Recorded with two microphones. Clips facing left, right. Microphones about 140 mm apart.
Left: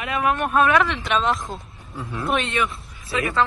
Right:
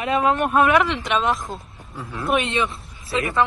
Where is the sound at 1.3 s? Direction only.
Centre (ahead or behind).